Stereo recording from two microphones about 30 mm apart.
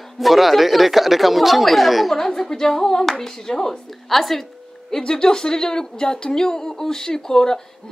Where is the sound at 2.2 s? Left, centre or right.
Centre.